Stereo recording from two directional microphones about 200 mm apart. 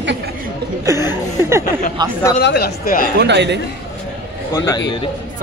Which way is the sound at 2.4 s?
55° left (ahead or behind).